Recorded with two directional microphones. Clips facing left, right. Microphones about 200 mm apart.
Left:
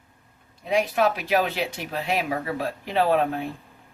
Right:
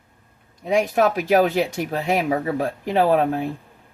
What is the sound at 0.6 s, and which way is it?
Speech, 45° right (ahead or behind).